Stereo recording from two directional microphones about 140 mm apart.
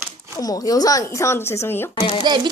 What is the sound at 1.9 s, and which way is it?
Speech, 35° left (ahead or behind).